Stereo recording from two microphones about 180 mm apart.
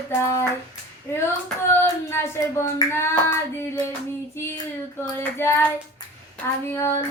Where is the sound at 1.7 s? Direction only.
15° left (ahead or behind).